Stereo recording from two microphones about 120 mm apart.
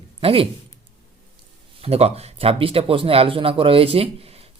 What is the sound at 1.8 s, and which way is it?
Speech, 60° right (ahead or behind).